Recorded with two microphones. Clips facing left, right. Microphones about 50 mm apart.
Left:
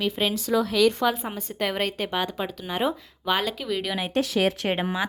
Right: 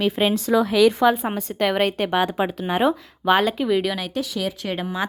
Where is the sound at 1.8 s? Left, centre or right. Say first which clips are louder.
Right 6 dB; right.